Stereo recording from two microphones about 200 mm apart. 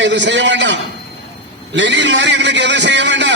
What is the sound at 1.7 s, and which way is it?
A man's voice, 65° right (ahead or behind).